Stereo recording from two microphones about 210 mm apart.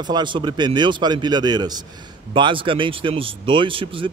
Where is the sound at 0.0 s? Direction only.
20° right (ahead or behind).